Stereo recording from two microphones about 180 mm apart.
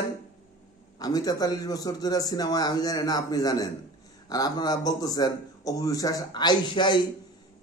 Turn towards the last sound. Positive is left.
turn(degrees=25)  # may be behind; listen again after turning